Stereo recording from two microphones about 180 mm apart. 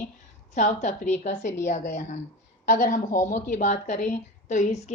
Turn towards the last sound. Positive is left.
turn(degrees=40)  # may be behind; listen again after turning